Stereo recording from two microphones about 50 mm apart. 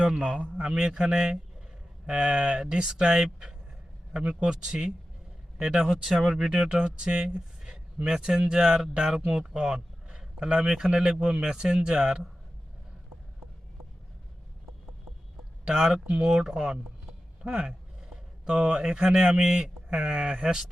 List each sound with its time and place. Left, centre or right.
0.0 s a man's voice: right
6.5 s speech: centre
15.6 s speech: centre
20.3 s speech: centre